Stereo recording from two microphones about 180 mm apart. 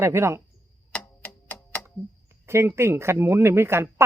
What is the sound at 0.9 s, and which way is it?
Clock, 5° left (ahead or behind).